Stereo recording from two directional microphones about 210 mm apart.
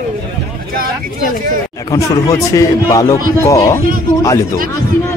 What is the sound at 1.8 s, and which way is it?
Speech, 15° left (ahead or behind).